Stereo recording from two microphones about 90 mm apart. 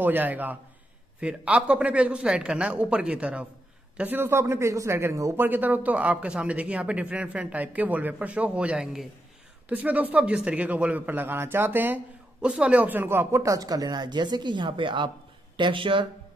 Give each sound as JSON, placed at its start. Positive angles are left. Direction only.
{"t": 0.0, "sound": "a man's voice", "side_deg": -20}
{"t": 4.2, "sound": "a man's voice", "side_deg": -25}
{"t": 5.4, "sound": "a man's voice", "side_deg": -20}